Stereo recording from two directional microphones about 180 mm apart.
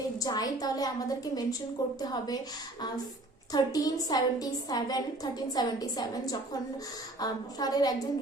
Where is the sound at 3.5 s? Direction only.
20° left (ahead or behind).